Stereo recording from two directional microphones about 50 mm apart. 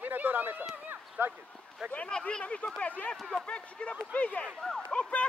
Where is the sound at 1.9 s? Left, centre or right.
Left.